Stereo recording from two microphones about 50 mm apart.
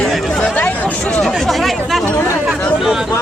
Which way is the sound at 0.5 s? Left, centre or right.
Left.